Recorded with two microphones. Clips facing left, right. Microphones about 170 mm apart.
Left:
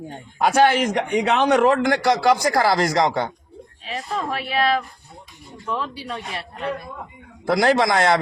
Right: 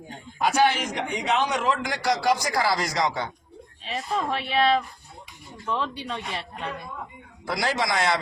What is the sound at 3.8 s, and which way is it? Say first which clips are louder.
Speech: left 1 dB; centre (ahead or behind).